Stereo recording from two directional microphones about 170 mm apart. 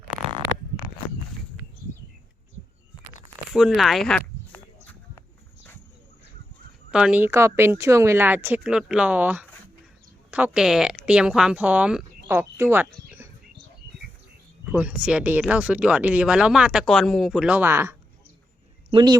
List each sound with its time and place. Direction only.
3.5 s speech: centre (ahead or behind)
6.9 s speech: 5° right (ahead or behind)
14.6 s speech: 5° right (ahead or behind)
18.9 s speech: 25° right (ahead or behind)